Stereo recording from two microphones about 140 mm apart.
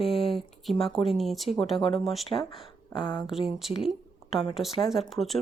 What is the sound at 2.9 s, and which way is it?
Speech, 35° left (ahead or behind).